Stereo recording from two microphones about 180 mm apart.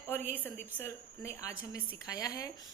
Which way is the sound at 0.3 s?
10° left (ahead or behind).